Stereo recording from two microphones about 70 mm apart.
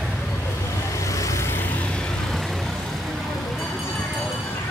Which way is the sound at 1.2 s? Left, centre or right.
Left.